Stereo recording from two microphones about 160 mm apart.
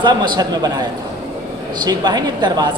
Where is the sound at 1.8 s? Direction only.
25° right (ahead or behind).